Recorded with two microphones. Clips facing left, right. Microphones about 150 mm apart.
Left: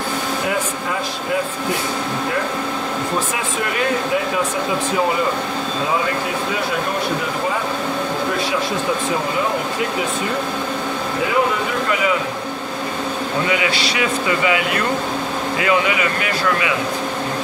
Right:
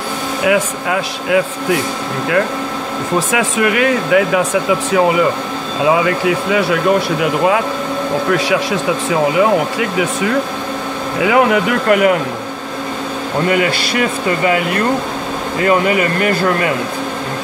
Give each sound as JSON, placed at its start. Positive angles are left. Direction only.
{"t": 0.5, "sound": "speech", "side_deg": -75}
{"t": 3.3, "sound": "speech", "side_deg": -90}
{"t": 11.2, "sound": "speech", "side_deg": -75}
{"t": 13.5, "sound": "speech", "side_deg": -50}